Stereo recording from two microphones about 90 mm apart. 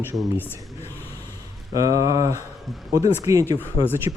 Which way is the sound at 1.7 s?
40° right (ahead or behind).